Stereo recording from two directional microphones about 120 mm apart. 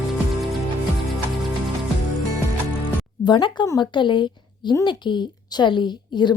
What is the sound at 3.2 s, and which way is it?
A woman's voice, 40° left (ahead or behind).